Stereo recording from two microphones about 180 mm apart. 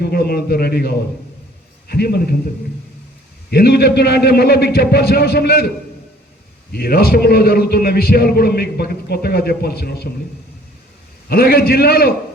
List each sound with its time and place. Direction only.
0.0 s a man's voice: 60° left (ahead or behind)
3.5 s a man's voice: 60° left (ahead or behind)
11.3 s a man's voice: 55° left (ahead or behind)